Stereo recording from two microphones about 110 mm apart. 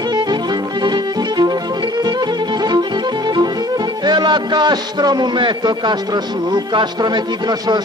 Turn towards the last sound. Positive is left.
turn(degrees=-40)  # may be behind; listen again after turning